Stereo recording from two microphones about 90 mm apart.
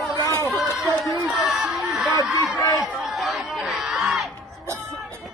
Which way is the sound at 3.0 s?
Centre (ahead or behind).